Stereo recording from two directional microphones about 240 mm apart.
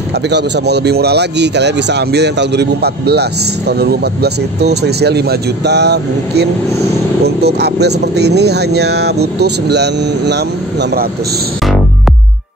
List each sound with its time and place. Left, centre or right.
0.3 s speech: right